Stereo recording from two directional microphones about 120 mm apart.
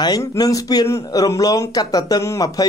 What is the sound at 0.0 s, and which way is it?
Speech, 30° left (ahead or behind).